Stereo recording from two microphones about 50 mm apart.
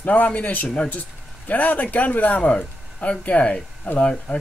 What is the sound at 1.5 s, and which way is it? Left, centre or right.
Speech, left.